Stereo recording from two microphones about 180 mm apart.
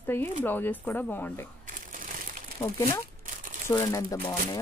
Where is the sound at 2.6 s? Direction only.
15° left (ahead or behind).